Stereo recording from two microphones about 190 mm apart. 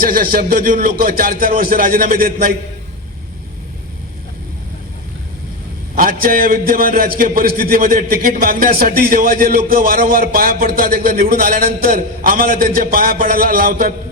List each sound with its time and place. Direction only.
0.0 s a man's voice: 50° right (ahead or behind)
6.0 s a man's voice: 50° right (ahead or behind)